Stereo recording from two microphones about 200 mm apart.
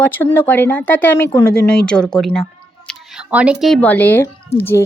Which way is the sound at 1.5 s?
5° left (ahead or behind).